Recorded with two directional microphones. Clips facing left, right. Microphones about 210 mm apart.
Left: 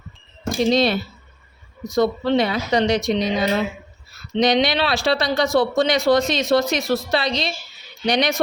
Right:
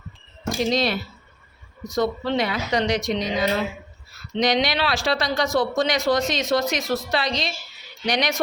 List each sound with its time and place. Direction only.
0.4 s speech: 30° left (ahead or behind)
2.0 s speech: 30° left (ahead or behind)
4.4 s speech: 25° left (ahead or behind)